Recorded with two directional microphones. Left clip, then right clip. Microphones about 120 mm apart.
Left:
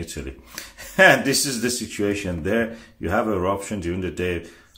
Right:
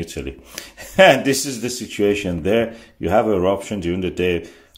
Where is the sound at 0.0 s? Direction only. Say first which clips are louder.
Right 5 dB; 25° right (ahead or behind).